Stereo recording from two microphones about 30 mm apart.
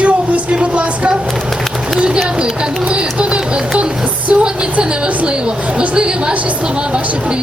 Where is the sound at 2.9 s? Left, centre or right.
Right.